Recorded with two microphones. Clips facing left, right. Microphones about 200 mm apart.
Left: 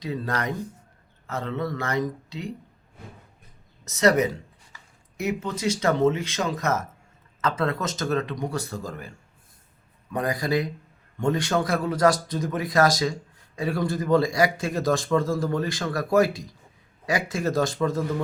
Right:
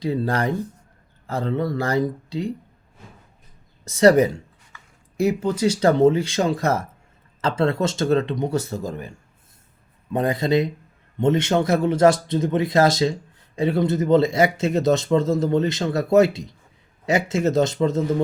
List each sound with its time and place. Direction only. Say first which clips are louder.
0.0 s speech: right 6 dB; 30° right (ahead or behind)
3.8 s speech: right 6 dB; 30° right (ahead or behind)